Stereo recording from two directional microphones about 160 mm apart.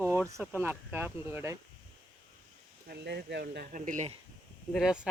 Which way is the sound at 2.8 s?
85° right.